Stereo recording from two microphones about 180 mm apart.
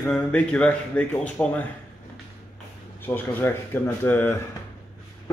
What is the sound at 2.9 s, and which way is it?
Speech, 10° left (ahead or behind).